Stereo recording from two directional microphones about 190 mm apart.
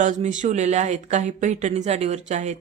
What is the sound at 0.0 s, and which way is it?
Speech, 40° right (ahead or behind).